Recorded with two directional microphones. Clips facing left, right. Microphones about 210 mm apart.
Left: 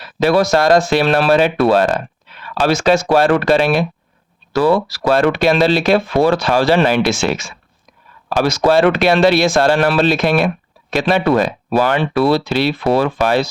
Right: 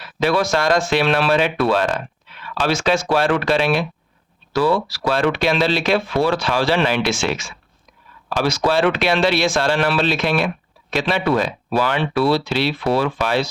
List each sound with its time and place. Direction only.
0.0 s speech: 40° left (ahead or behind)